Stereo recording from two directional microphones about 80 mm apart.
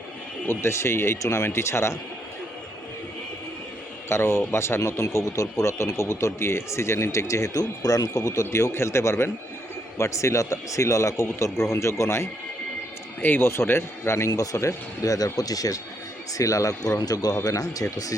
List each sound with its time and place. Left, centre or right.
0.4 s speech: left
4.1 s speech: left
14.3 s speech: left